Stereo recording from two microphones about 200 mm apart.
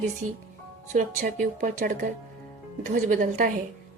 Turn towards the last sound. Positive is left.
turn(degrees=-40)  # may be behind; listen again after turning